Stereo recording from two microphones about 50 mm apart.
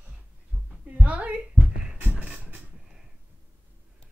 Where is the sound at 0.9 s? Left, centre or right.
Right.